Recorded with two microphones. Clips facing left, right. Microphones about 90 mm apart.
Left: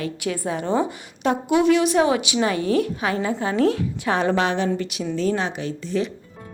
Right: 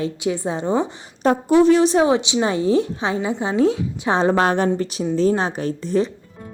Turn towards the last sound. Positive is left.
turn(degrees=-40)  # may be behind; listen again after turning